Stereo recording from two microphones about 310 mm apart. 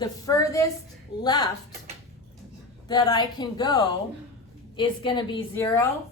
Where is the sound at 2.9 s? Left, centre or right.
Centre.